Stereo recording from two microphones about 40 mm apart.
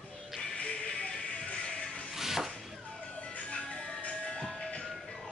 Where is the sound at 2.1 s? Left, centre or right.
Centre.